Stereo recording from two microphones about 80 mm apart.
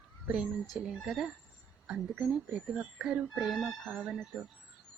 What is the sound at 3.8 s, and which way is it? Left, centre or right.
Speech, centre.